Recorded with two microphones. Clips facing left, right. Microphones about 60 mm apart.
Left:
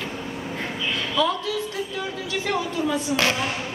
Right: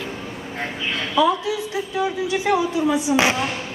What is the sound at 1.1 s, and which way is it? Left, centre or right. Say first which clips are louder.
A woman's voice: right 6 dB; centre.